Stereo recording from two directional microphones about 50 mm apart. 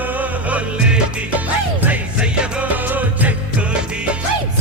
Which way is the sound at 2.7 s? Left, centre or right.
Right.